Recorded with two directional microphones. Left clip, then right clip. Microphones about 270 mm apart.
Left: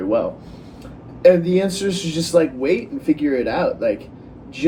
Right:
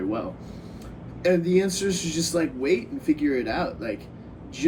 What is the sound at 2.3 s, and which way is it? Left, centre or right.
Speech, left.